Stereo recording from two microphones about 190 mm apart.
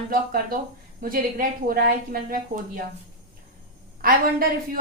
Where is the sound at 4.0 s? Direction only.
50° right (ahead or behind).